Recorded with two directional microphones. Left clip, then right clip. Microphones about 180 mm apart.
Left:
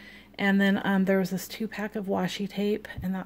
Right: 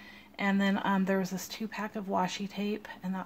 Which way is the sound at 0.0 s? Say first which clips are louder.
Left 5 dB; 50° left (ahead or behind).